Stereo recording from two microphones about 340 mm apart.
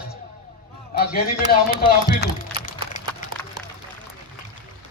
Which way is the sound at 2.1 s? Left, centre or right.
Left.